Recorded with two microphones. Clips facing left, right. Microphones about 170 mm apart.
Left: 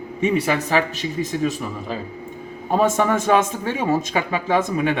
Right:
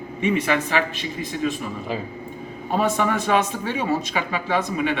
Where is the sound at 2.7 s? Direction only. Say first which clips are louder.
Left 3 dB; 45° left (ahead or behind).